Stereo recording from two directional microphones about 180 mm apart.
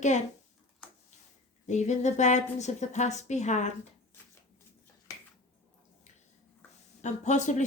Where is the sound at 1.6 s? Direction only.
40° left (ahead or behind).